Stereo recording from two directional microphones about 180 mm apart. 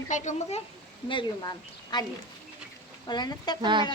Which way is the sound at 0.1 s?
40° left (ahead or behind).